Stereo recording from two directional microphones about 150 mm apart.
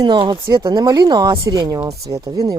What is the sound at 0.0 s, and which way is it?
Speech, 30° right (ahead or behind).